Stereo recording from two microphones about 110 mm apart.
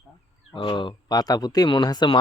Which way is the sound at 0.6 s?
45° left (ahead or behind).